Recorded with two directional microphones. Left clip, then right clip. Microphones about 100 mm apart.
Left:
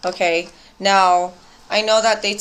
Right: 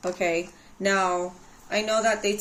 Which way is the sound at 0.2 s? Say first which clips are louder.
Left 9 dB; 25° right (ahead or behind).